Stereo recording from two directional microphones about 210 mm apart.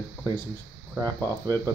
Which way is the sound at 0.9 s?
15° right (ahead or behind).